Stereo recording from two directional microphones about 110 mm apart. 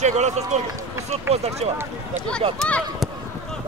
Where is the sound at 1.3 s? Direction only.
75° right (ahead or behind).